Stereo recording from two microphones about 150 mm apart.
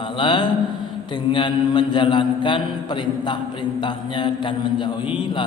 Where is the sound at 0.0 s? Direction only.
30° left (ahead or behind).